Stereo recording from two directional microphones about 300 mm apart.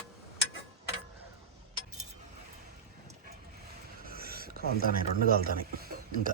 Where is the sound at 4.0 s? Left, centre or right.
Right.